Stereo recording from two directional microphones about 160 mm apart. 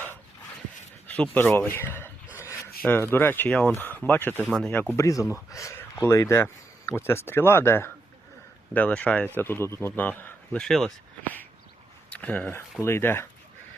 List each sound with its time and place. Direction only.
1.0 s a sound: 10° left (ahead or behind)
2.8 s speech: 10° left (ahead or behind)
4.9 s speech: 20° left (ahead or behind)